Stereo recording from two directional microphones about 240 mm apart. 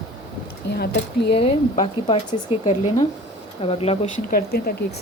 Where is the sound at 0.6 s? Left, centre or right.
Left.